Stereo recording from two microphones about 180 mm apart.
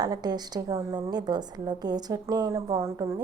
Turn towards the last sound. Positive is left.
turn(degrees=-20)  # may be behind; listen again after turning